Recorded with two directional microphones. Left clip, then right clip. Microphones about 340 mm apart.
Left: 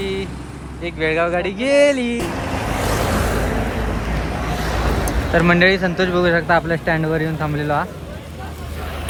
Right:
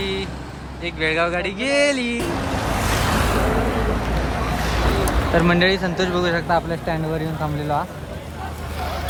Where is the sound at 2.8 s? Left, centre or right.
Centre.